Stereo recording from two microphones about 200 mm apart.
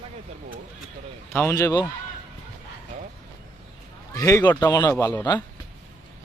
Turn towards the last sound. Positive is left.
turn(degrees=15)  # may be behind; listen again after turning